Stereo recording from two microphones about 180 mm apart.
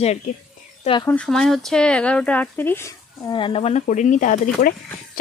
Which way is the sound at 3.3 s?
30° left (ahead or behind).